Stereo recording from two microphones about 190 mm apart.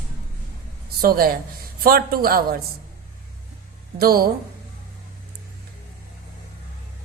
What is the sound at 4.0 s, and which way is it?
Speech, 50° right (ahead or behind).